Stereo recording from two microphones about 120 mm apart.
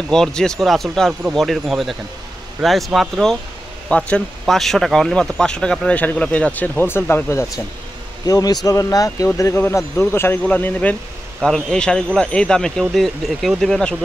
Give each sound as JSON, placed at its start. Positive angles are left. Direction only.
{"t": 0.1, "sound": "speech", "side_deg": 5}
{"t": 8.3, "sound": "speech", "side_deg": 30}